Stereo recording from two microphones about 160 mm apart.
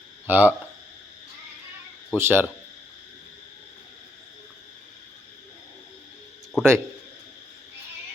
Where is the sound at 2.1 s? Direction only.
15° right (ahead or behind).